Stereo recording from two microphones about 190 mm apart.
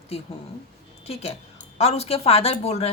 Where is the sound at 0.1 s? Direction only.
30° left (ahead or behind).